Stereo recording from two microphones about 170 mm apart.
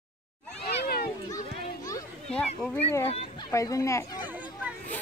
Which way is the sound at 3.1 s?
35° left (ahead or behind).